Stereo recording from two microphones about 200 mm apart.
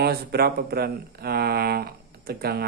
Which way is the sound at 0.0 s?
50° right (ahead or behind).